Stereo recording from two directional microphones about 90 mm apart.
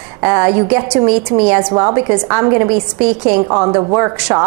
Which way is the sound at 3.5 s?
30° right (ahead or behind).